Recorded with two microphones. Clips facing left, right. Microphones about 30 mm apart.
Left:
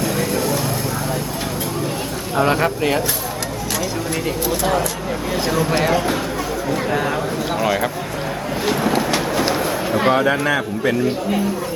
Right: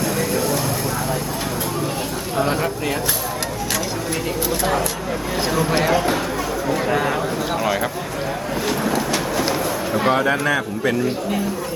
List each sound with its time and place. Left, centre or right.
0.2 s vehicle: centre
2.3 s speech: left
4.4 s speech: centre